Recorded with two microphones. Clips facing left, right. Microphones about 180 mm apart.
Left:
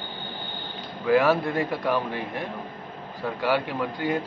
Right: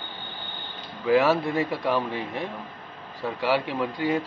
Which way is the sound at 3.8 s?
5° right (ahead or behind).